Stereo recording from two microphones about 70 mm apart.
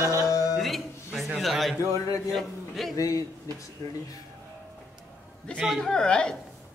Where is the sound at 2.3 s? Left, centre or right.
Centre.